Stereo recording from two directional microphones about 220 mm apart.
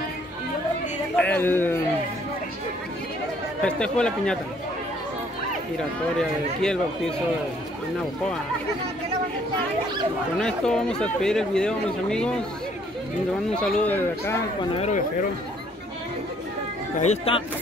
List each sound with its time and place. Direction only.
1.1 s speech: 5° left (ahead or behind)
3.6 s speech: 5° left (ahead or behind)
6.1 s speech: 5° left (ahead or behind)
10.4 s speech: 5° left (ahead or behind)
13.6 s speech: 5° left (ahead or behind)
17.0 s speech: 30° left (ahead or behind)